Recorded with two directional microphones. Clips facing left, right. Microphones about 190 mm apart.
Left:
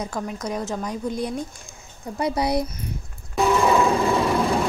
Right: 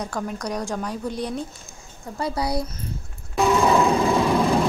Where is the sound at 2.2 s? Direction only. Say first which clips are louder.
Left 3 dB; 20° left (ahead or behind).